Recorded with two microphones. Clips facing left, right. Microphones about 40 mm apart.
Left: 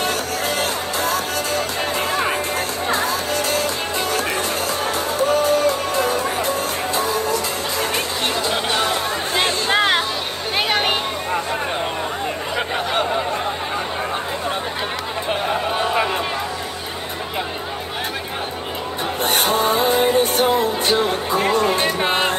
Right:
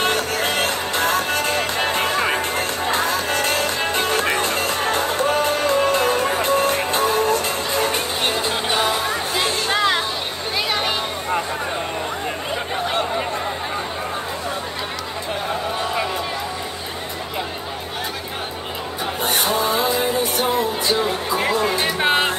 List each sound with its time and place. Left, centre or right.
0.0 s music: right
9.3 s music: left
10.7 s a sound: left
19.2 s music: left
22.0 s music: centre